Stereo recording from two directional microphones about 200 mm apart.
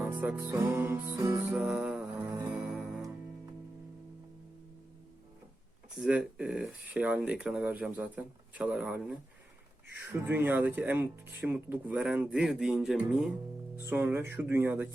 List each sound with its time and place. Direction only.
0.0 s music: 10° right (ahead or behind)
1.1 s music: 25° right (ahead or behind)
1.5 s music: 5° right (ahead or behind)
6.0 s speech: 5° right (ahead or behind)